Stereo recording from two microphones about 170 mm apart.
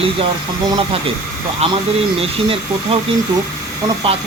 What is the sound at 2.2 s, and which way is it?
Speech, 35° right (ahead or behind).